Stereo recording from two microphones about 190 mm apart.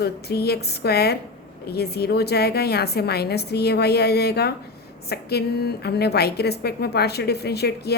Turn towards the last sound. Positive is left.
turn(degrees=60)  # may be behind; listen again after turning